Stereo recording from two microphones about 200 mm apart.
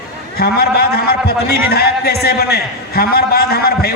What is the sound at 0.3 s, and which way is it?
A man's voice, 50° left (ahead or behind).